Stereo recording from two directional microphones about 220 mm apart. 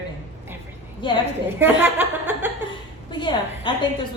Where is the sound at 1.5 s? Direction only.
10° right (ahead or behind).